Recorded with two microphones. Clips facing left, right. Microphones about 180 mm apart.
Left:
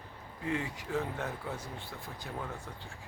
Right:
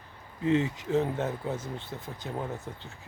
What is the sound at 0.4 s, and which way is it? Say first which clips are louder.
Speech: right 9 dB; 25° right (ahead or behind).